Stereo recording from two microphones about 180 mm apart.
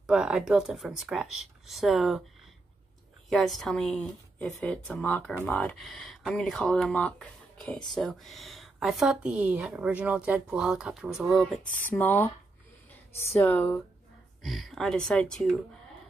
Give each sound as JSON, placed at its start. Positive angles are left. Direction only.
{"t": 0.0, "sound": "a woman's voice", "side_deg": -5}
{"t": 3.3, "sound": "a woman's voice", "side_deg": 0}
{"t": 11.6, "sound": "speech", "side_deg": 50}
{"t": 11.9, "sound": "a woman's voice", "side_deg": 10}